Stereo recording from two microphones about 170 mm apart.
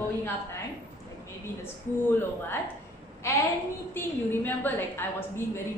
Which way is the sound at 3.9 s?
10° left (ahead or behind).